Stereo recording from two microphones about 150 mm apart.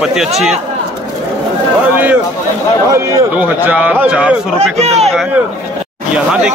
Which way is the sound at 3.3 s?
10° right (ahead or behind).